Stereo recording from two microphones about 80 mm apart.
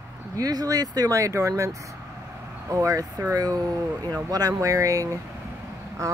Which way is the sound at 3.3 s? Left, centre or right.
Right.